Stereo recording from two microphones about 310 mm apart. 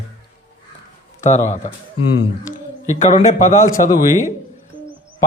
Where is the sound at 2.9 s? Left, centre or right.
Left.